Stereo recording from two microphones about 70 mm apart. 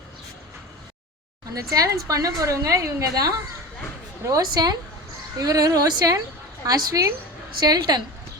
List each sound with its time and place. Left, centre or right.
1.5 s a woman's voice: right
4.5 s a woman's voice: right
5.4 s a woman's voice: right
7.6 s a woman's voice: right